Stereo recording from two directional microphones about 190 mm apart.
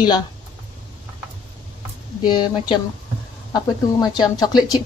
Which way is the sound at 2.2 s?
25° left (ahead or behind).